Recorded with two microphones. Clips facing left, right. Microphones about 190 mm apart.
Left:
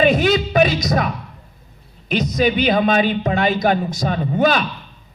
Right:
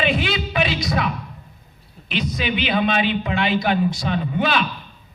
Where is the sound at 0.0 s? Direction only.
45° left (ahead or behind).